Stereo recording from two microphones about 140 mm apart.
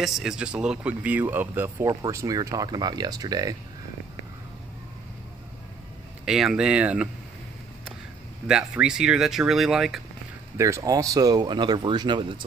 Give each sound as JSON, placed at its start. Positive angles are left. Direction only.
{"t": 0.0, "sound": "speech", "side_deg": -5}
{"t": 1.9, "sound": "speech", "side_deg": -25}
{"t": 6.2, "sound": "speech", "side_deg": -5}
{"t": 8.5, "sound": "speech", "side_deg": -5}
{"t": 10.6, "sound": "speech", "side_deg": -25}